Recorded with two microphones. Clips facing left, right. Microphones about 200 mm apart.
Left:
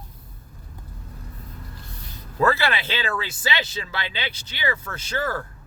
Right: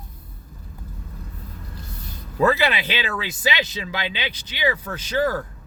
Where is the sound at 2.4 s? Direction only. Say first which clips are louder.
Right 2 dB; 15° right (ahead or behind).